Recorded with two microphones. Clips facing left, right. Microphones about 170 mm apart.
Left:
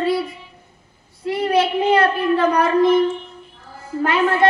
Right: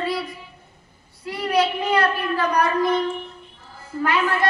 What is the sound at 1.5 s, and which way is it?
A child's voice, 25° left (ahead or behind).